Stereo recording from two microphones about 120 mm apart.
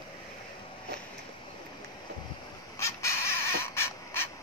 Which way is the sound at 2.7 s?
25° left (ahead or behind).